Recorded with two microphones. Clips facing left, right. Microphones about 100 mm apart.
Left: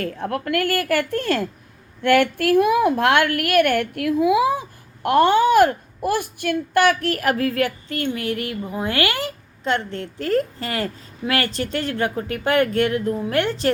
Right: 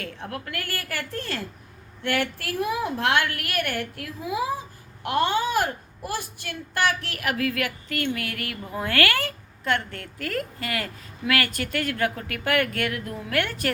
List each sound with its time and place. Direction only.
0.0 s a woman's voice: 50° left (ahead or behind); by 4.6 s 75° left (ahead or behind)
5.0 s a child's voice: 50° left (ahead or behind); by 13.7 s 25° left (ahead or behind)